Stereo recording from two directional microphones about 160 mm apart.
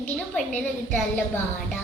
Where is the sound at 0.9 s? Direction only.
15° left (ahead or behind).